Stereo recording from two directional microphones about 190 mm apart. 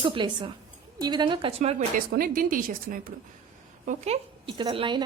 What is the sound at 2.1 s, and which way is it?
A woman's voice, 50° right (ahead or behind).